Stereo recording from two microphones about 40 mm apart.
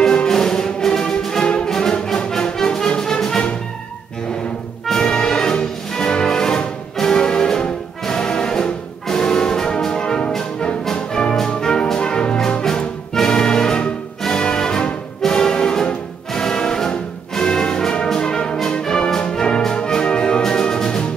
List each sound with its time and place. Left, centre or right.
0.0 s music: centre
4.8 s music: centre
8.0 s brass instrument: centre
11.3 s music: centre
11.9 s brass instrument: centre
12.6 s music: centre